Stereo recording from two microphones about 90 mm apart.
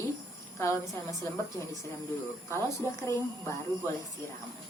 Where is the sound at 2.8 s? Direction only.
35° left (ahead or behind).